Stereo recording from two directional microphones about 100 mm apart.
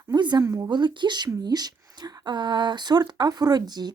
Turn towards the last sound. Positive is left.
turn(degrees=-45)  # may be behind; listen again after turning